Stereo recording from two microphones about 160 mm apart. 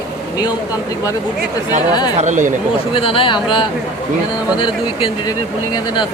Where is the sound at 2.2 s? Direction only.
50° right (ahead or behind).